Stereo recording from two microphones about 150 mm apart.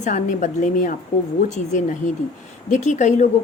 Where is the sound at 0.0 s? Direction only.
60° left (ahead or behind).